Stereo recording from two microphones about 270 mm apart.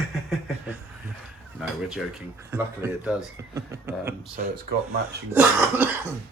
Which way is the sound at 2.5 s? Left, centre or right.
Centre.